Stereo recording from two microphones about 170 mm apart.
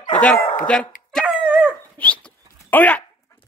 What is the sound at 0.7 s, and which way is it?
Speech, 5° left (ahead or behind).